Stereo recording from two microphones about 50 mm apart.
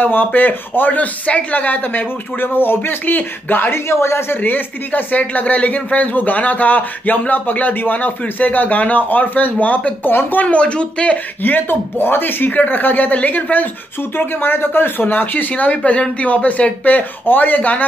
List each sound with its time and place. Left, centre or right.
0.0 s speech: left
3.7 s speech: left
4.4 s speech: left
11.4 s speech: left
14.1 s speech: left